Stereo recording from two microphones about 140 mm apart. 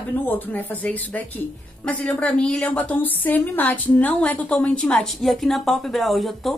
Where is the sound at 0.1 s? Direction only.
15° left (ahead or behind).